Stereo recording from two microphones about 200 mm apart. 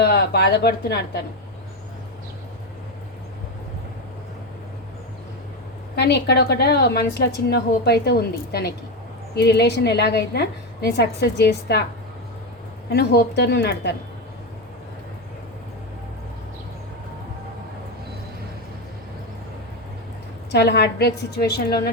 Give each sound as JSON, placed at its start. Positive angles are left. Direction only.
{"t": 0.0, "sound": "a woman's voice", "side_deg": 55}
{"t": 6.0, "sound": "a woman's voice", "side_deg": 55}
{"t": 12.9, "sound": "a woman's voice", "side_deg": 55}
{"t": 20.5, "sound": "a woman's voice", "side_deg": 55}